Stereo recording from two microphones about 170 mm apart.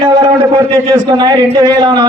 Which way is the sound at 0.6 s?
15° right (ahead or behind).